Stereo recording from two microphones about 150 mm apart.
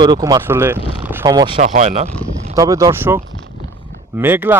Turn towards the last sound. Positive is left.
turn(degrees=-15)  # may be behind; listen again after turning